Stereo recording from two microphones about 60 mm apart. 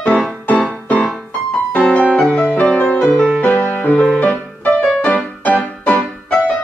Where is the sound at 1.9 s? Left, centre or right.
Left.